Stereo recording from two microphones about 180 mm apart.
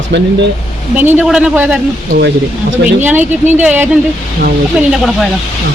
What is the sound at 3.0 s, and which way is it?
Speech, 10° right (ahead or behind).